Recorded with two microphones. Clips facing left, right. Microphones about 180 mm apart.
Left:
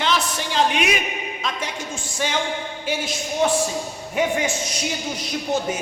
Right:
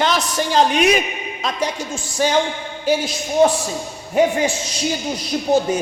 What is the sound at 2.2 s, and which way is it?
A man's voice, 40° right (ahead or behind).